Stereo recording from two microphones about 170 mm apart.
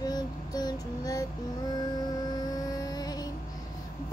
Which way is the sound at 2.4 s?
20° left (ahead or behind).